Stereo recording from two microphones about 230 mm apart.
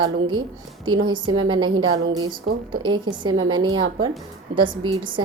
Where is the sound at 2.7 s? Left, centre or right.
Centre.